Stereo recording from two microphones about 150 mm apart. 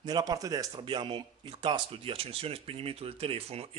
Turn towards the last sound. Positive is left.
turn(degrees=-40)  # may be behind; listen again after turning